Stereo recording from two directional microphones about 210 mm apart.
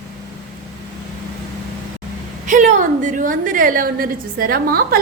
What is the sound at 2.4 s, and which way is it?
A woman's voice, 35° right (ahead or behind).